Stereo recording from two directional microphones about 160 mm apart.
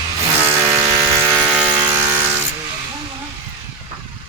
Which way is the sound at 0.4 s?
15° right (ahead or behind).